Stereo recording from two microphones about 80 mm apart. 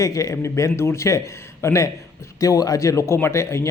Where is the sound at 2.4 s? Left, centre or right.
Left.